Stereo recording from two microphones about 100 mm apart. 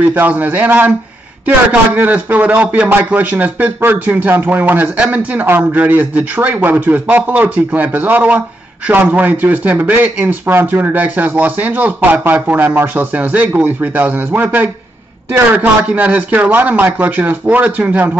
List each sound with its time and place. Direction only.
0.1 s a man's voice: 20° right (ahead or behind)